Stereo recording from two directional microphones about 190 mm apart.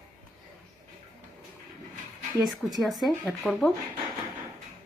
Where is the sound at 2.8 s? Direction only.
Centre (ahead or behind).